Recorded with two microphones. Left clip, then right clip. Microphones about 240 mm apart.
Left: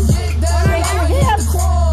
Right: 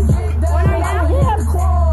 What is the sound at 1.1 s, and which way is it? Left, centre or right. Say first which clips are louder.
Music: left 4 dB; left.